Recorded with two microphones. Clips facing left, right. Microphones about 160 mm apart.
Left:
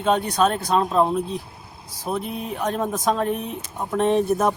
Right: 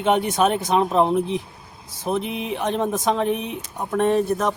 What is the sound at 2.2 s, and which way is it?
Speech, 90° right.